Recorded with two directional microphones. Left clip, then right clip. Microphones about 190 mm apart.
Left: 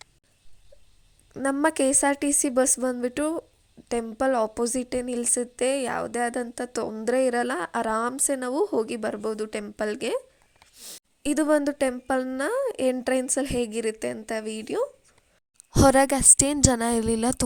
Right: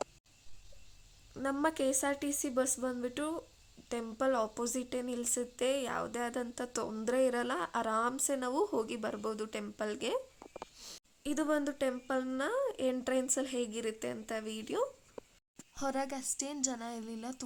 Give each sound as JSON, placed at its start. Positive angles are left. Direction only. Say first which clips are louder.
{"t": 1.3, "sound": "a woman's voice", "louder": "left 9 dB", "side_deg": 35}
{"t": 10.8, "sound": "a sound", "louder": "left 6 dB", "side_deg": 25}
{"t": 11.2, "sound": "a woman's voice", "louder": "left 11 dB", "side_deg": 35}
{"t": 15.7, "sound": "a woman's voice", "louder": "left 18 dB", "side_deg": 55}